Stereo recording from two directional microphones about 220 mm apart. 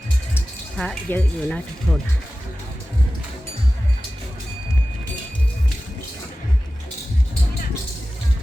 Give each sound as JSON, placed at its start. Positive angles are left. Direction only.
{"t": 0.3, "sound": "speech", "side_deg": 5}